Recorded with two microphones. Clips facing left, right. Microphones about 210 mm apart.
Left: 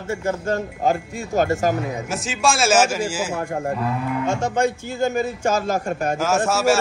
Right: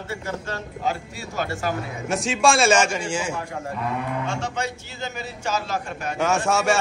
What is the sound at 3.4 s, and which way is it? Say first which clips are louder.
Speech: left 6 dB; 50° left (ahead or behind).